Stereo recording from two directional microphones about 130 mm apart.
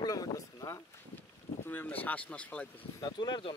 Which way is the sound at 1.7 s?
15° left (ahead or behind).